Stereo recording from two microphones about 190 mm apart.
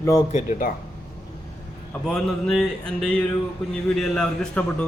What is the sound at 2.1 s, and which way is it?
A man's voice, 5° left (ahead or behind).